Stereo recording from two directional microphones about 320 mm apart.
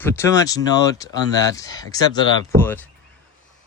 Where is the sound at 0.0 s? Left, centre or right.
Centre.